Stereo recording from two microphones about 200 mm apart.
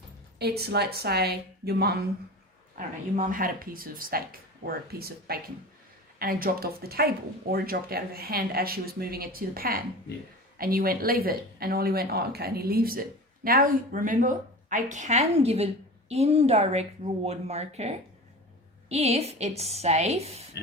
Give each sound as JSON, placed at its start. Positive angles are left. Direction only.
{"t": 0.3, "sound": "speech", "side_deg": -55}
{"t": 2.7, "sound": "a woman's voice", "side_deg": -40}